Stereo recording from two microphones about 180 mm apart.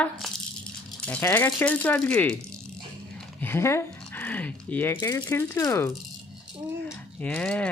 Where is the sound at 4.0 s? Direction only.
10° left (ahead or behind).